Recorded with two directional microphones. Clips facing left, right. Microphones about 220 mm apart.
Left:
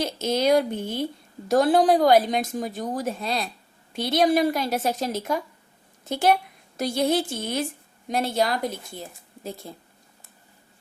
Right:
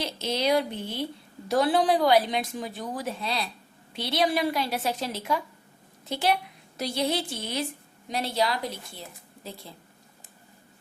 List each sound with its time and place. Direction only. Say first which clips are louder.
0.0 s a woman's voice: left 5 dB; 45° left (ahead or behind)